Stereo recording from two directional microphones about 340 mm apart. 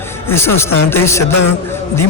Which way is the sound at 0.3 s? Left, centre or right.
Centre.